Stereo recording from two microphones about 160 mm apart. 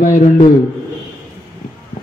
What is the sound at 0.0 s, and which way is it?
Speech, 55° left (ahead or behind).